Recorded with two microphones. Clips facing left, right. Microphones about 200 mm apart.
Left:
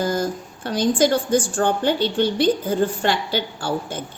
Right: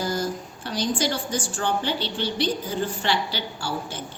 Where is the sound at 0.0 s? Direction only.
50° left (ahead or behind).